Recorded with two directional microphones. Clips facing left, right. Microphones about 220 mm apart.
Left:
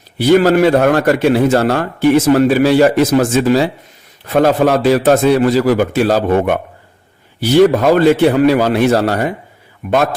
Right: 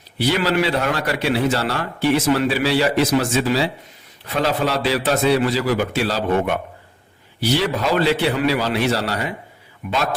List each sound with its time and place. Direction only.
0.2 s a man's voice: 50° left (ahead or behind)